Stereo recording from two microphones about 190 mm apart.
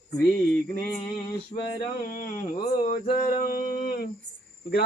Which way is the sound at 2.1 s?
50° left (ahead or behind).